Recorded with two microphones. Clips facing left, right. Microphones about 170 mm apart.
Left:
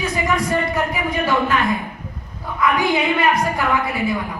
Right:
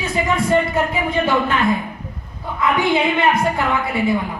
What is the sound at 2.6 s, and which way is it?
Speech, 25° right (ahead or behind).